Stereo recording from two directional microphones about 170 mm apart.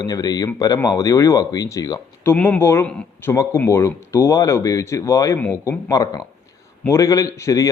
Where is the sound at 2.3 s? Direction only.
10° left (ahead or behind).